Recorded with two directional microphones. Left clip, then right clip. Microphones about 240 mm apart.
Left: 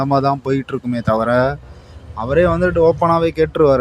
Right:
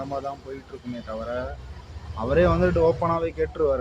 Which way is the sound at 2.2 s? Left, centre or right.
Left.